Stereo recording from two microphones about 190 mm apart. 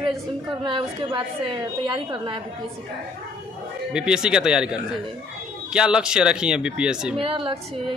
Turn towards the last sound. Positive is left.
turn(degrees=-30)  # may be behind; listen again after turning